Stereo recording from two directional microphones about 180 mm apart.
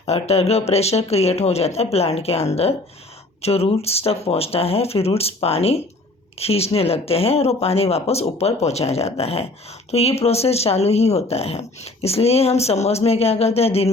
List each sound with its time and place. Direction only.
0.0 s speech: 35° left (ahead or behind)